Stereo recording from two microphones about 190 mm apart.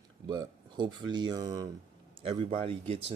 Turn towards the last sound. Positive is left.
turn(degrees=-30)  # may be behind; listen again after turning